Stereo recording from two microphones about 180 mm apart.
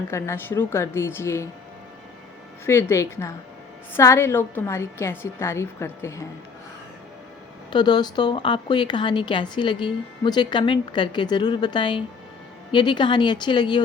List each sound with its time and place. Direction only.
0.1 s a woman's voice: 15° left (ahead or behind)
2.6 s a woman's voice: 15° left (ahead or behind)
7.7 s a woman's voice: 25° left (ahead or behind)